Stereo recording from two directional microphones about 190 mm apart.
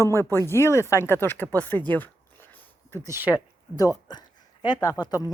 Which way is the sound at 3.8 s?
20° left (ahead or behind).